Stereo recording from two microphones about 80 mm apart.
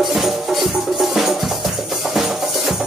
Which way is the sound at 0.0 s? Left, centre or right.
Centre.